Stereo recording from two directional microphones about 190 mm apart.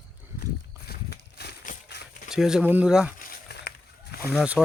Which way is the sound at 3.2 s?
60° left (ahead or behind).